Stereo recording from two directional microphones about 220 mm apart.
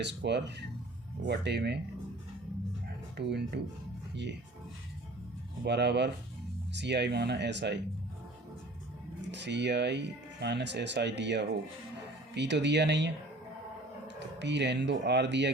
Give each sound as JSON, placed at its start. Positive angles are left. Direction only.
{"t": 0.0, "sound": "speech", "side_deg": -50}
{"t": 3.2, "sound": "speech", "side_deg": -50}
{"t": 5.6, "sound": "speech", "side_deg": -50}
{"t": 9.3, "sound": "speech", "side_deg": -50}
{"t": 14.2, "sound": "speech", "side_deg": -50}